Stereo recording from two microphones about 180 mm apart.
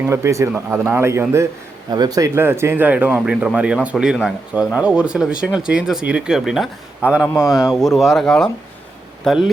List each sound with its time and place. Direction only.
0.0 s a man's voice: 15° right (ahead or behind)